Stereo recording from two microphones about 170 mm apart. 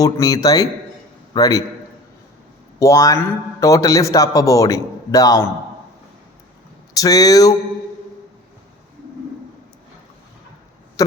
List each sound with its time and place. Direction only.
0.0 s a man's voice: 20° left (ahead or behind)
2.7 s a man's voice: 20° left (ahead or behind)
6.9 s a man's voice: 20° left (ahead or behind)